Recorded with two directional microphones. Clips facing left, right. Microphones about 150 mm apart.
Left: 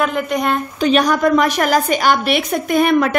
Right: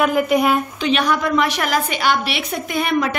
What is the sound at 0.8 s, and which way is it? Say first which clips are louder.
A woman's voice: left 6 dB; 40° left (ahead or behind).